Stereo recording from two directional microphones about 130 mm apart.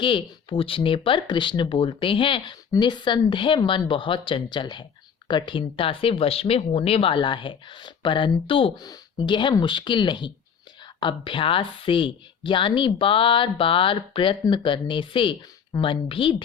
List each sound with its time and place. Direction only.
0.0 s speech: 40° left (ahead or behind)